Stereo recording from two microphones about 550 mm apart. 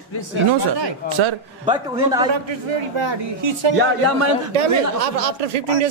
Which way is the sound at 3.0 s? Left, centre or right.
Right.